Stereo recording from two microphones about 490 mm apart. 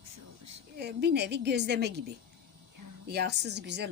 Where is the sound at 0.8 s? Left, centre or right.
Centre.